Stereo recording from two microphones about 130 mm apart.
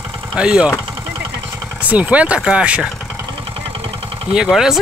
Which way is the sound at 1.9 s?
10° right (ahead or behind).